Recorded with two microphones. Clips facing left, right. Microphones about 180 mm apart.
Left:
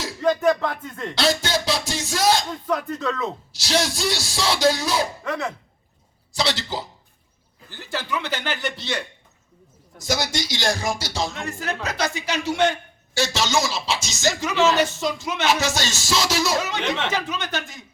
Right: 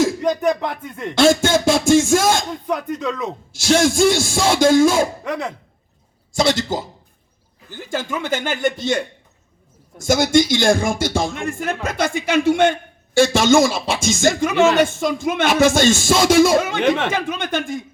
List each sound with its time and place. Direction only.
0.2 s speech: 15° right (ahead or behind)
1.1 s speech: 50° right (ahead or behind)
2.6 s speech: 15° right (ahead or behind)
3.5 s speech: 50° right (ahead or behind)
5.2 s speech: 15° right (ahead or behind)
6.3 s speech: 50° right (ahead or behind)